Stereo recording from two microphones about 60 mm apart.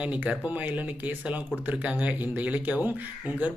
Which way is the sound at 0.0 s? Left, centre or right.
Right.